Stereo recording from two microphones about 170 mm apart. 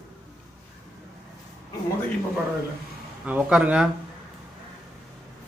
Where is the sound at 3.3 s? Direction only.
10° right (ahead or behind).